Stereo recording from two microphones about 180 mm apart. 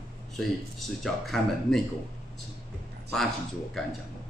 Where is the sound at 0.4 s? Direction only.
Centre (ahead or behind).